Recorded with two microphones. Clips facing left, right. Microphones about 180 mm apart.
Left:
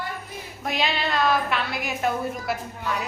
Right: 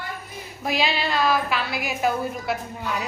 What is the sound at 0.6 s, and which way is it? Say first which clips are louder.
A woman's voice: right 2 dB; centre (ahead or behind).